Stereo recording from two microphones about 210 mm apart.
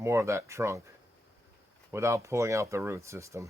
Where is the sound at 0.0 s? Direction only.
15° right (ahead or behind).